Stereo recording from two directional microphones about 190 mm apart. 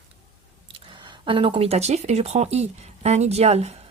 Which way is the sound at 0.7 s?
25° right (ahead or behind).